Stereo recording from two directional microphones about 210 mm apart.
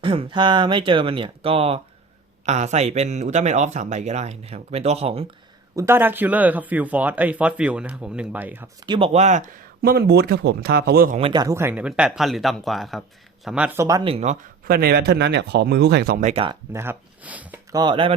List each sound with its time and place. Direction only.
0.0 s speech: 25° right (ahead or behind)
5.7 s speech: 10° right (ahead or behind)
8.9 s speech: 30° right (ahead or behind); by 11.2 s 45° right (ahead or behind)
11.2 s speech: 20° right (ahead or behind)
14.1 s speech: 30° right (ahead or behind)
14.7 s speech: 45° right (ahead or behind)
16.1 s speech: 30° right (ahead or behind)
16.7 s speech: 10° right (ahead or behind)